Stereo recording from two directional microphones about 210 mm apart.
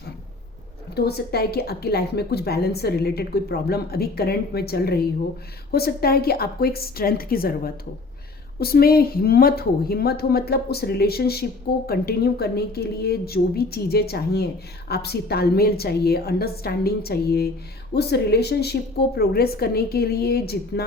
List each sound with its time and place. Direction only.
0.9 s a woman's voice: 50° left (ahead or behind)